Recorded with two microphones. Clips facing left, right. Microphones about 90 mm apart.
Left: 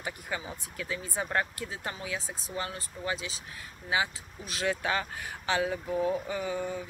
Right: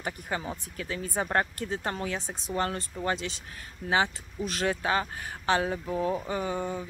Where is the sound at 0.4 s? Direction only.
45° right (ahead or behind).